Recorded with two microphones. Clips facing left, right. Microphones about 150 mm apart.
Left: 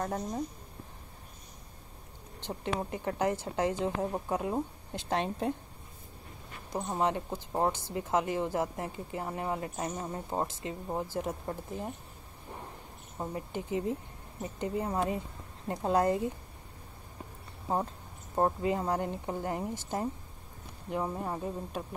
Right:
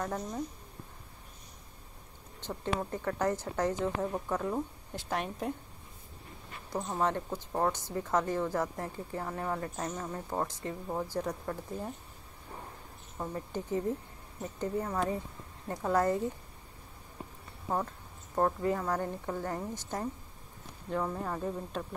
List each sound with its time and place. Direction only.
0.0 s a woman's voice: 30° left (ahead or behind)
2.4 s a woman's voice: 15° left (ahead or behind)
6.7 s speech: 15° left (ahead or behind)
13.2 s speech: 15° left (ahead or behind)
17.6 s a woman's voice: 25° left (ahead or behind)
21.4 s speech: 5° left (ahead or behind)